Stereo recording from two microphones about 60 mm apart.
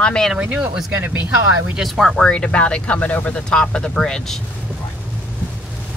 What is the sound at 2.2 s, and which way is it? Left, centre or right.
Speech, centre.